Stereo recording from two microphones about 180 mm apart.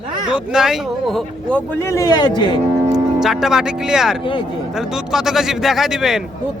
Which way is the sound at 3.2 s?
Centre (ahead or behind).